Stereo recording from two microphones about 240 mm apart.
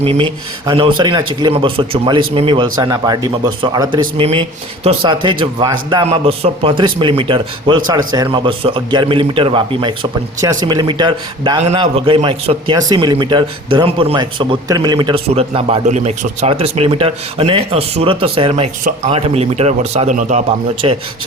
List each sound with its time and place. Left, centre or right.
0.0 s a man's voice: right